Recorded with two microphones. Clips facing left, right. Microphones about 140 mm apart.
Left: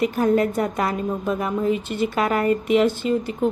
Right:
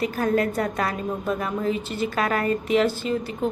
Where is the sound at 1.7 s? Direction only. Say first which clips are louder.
Left 4 dB; 55° left (ahead or behind).